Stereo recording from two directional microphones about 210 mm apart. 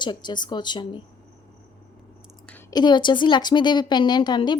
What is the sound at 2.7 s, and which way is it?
A woman's voice, 20° left (ahead or behind).